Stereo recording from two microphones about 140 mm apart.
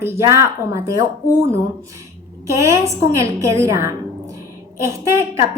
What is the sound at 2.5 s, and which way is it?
Speech, 20° right (ahead or behind).